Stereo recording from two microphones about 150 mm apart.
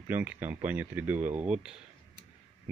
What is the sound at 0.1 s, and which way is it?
Speech, 10° right (ahead or behind).